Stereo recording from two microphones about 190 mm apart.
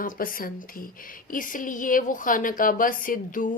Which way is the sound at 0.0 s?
45° left (ahead or behind).